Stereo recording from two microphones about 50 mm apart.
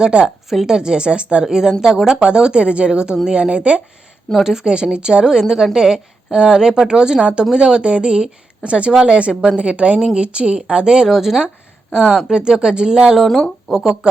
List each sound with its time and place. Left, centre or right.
0.0 s a woman's voice: right
0.5 s speech: centre
0.8 s a woman's voice: centre
12.4 s a woman's voice: centre